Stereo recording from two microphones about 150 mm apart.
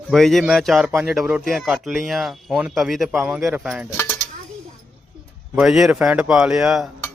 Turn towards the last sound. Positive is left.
turn(degrees=-5)  # may be behind; listen again after turning